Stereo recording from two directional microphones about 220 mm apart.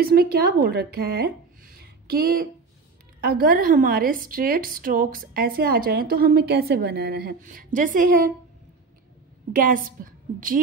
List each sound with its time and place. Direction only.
0.0 s a woman's voice: 45° right (ahead or behind)
9.5 s a woman's voice: 40° right (ahead or behind)